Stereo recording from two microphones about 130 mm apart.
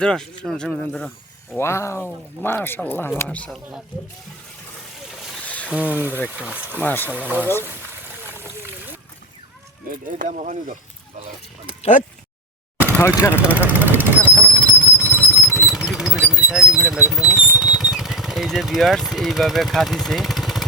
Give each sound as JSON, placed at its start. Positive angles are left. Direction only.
{"t": 0.0, "sound": "speech", "side_deg": 5}
{"t": 1.5, "sound": "speech", "side_deg": 20}
{"t": 5.6, "sound": "speech", "side_deg": -10}
{"t": 6.8, "sound": "speech", "side_deg": 15}
{"t": 7.1, "sound": "speech", "side_deg": -15}
{"t": 10.2, "sound": "speech", "side_deg": -70}
{"t": 11.8, "sound": "speech", "side_deg": 70}
{"t": 13.0, "sound": "speech", "side_deg": 20}
{"t": 13.3, "sound": "speech", "side_deg": -10}
{"t": 14.3, "sound": "train", "side_deg": -15}
{"t": 15.5, "sound": "a sound", "side_deg": 0}